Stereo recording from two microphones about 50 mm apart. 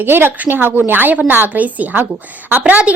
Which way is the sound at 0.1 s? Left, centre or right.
Right.